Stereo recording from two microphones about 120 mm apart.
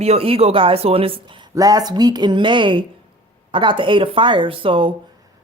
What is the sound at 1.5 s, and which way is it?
A woman's voice, 30° right (ahead or behind).